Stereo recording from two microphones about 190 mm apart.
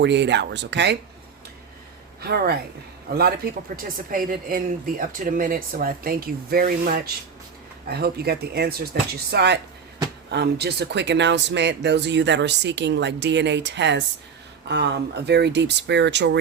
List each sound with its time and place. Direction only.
0.0 s speech: 65° right (ahead or behind)
2.2 s speech: 55° right (ahead or behind)